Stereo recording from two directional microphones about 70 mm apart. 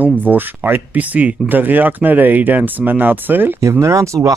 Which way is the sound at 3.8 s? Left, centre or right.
Right.